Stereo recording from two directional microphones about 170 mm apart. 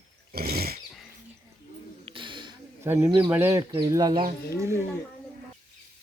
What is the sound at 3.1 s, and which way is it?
Speech, 30° right (ahead or behind).